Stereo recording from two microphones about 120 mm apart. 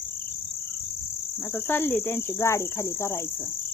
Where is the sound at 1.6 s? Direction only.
15° left (ahead or behind).